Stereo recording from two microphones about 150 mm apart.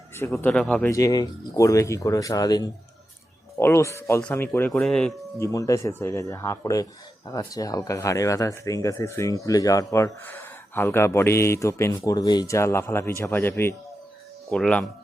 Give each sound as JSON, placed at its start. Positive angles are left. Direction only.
{"t": 0.3, "sound": "speech", "side_deg": 10}
{"t": 0.9, "sound": "speech", "side_deg": 20}
{"t": 5.4, "sound": "speech", "side_deg": 20}
{"t": 14.5, "sound": "speech", "side_deg": 5}